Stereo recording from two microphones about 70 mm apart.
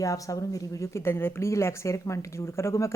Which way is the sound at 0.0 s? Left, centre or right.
Left.